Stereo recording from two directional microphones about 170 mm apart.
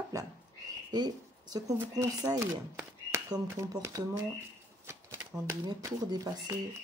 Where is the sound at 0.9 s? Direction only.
25° right (ahead or behind).